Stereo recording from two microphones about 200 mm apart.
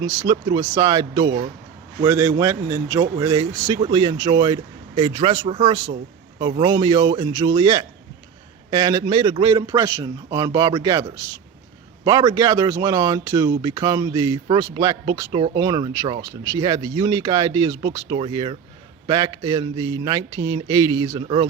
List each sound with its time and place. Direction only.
0.0 s speech: 20° right (ahead or behind)
12.0 s speech: 20° right (ahead or behind)